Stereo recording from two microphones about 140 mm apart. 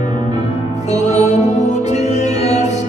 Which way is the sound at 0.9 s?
55° left (ahead or behind).